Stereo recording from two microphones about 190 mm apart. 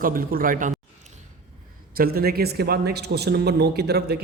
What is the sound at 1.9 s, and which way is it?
A man's voice, 50° right (ahead or behind).